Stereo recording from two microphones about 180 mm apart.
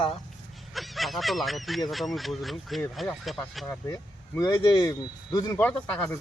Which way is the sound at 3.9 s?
20° left (ahead or behind).